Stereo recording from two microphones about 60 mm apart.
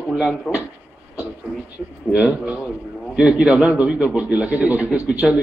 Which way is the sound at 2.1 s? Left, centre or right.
Right.